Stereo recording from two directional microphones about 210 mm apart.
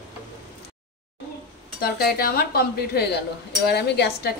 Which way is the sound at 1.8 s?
45° left (ahead or behind).